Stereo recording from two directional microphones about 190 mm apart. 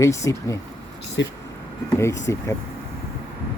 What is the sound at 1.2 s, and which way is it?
Speech, 70° left (ahead or behind).